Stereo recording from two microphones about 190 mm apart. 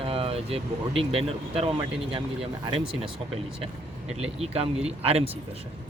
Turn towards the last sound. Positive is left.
turn(degrees=-35)  # may be behind; listen again after turning